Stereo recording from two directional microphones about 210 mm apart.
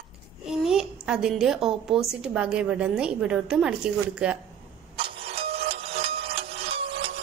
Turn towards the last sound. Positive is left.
turn(degrees=-25)  # may be behind; listen again after turning